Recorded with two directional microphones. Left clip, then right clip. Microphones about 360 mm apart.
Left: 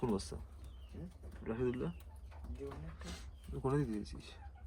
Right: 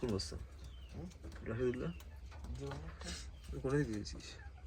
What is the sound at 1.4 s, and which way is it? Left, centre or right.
Speech, centre.